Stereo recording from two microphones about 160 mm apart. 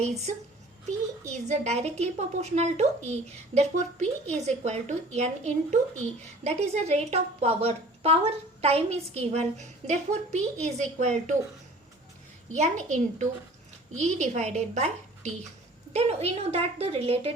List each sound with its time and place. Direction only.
0.0 s a woman's voice: 45° right (ahead or behind)
12.5 s a woman's voice: 45° right (ahead or behind)